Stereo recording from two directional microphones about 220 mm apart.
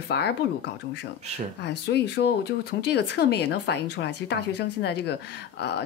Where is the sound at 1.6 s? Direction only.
50° left (ahead or behind).